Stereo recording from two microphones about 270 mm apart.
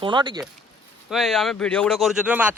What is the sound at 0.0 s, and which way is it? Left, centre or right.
Speech, centre.